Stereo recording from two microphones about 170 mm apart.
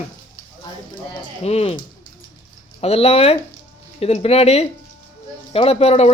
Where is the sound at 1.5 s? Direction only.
35° left (ahead or behind).